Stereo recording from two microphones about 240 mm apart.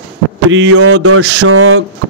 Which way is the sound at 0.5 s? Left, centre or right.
Right.